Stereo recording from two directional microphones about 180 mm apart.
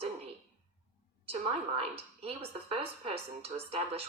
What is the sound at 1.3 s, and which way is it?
Speech, 35° right (ahead or behind).